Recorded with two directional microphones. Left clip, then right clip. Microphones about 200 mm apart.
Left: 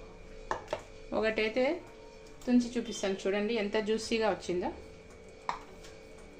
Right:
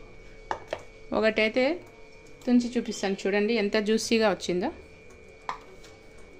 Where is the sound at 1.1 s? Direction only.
40° right (ahead or behind).